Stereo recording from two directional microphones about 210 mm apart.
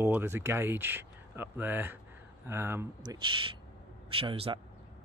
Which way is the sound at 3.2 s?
25° right (ahead or behind).